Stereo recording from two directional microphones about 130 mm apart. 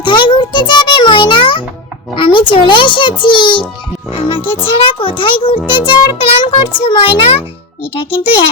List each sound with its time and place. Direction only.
0.0 s music: 35° left (ahead or behind)
2.1 s a child's voice: 40° left (ahead or behind)